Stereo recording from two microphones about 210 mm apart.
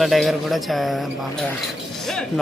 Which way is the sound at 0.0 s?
Centre (ahead or behind).